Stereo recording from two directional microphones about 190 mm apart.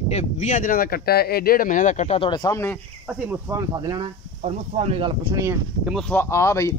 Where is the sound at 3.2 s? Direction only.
20° right (ahead or behind).